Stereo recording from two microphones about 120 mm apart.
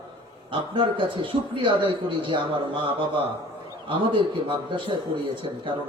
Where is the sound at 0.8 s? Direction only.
45° right (ahead or behind).